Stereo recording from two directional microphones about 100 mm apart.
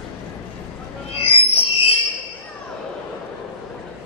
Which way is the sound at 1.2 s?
70° left (ahead or behind).